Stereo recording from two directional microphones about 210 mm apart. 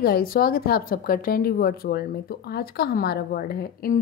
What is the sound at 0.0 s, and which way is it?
A woman's voice, 45° left (ahead or behind).